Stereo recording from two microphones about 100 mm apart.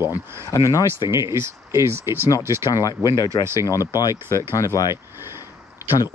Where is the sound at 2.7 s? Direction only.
40° left (ahead or behind).